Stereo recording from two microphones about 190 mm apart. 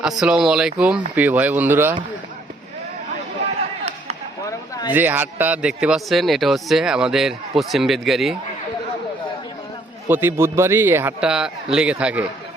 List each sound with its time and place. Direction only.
0.0 s a man's voice: 5° right (ahead or behind)
4.4 s a sound: 15° left (ahead or behind)
4.9 s a man's voice: 10° right (ahead or behind)
10.1 s a man's voice: 10° right (ahead or behind)